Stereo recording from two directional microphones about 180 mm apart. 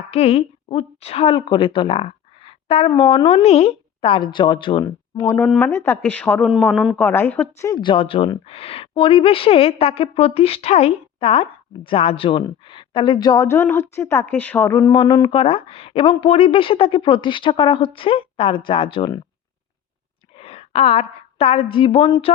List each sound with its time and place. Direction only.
0.1 s a woman's voice: 35° left (ahead or behind); by 5.4 s 20° left (ahead or behind)
5.4 s a woman's voice: 5° left (ahead or behind); by 19.2 s 30° left (ahead or behind)
20.3 s a woman's voice: 30° left (ahead or behind)